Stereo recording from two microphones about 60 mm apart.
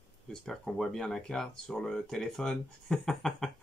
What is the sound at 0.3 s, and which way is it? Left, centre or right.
Speech, centre.